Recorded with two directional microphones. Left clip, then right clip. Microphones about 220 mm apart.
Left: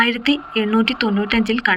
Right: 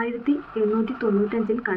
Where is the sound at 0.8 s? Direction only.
40° left (ahead or behind).